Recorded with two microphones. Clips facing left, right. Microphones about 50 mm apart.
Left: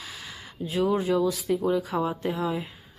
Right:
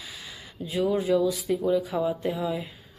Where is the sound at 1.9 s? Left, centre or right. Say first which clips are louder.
Even; left.